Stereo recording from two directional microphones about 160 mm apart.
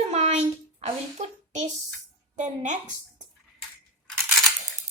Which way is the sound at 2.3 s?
50° right (ahead or behind).